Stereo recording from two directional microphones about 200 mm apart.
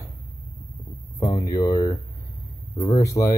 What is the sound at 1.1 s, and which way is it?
Speech, 15° left (ahead or behind).